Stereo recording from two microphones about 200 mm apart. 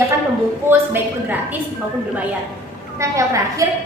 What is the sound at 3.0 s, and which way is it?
Speech, 15° right (ahead or behind).